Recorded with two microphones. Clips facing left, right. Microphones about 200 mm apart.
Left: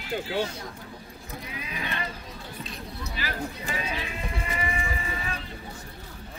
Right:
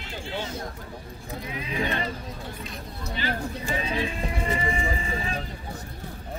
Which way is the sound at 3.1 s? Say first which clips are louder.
Right 4 dB; 30° right (ahead or behind).